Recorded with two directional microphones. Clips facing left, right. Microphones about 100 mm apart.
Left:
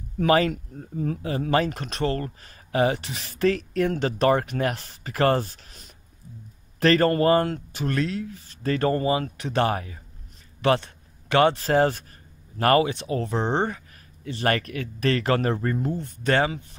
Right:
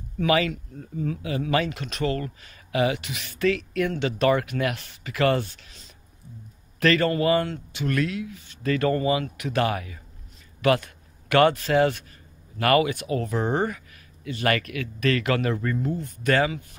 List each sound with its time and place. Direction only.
0.2 s speech: 40° left (ahead or behind)
6.8 s a man's voice: 35° left (ahead or behind)
7.9 s speech: 30° left (ahead or behind)
10.6 s a sound: 30° left (ahead or behind)
11.5 s speech: 35° left (ahead or behind)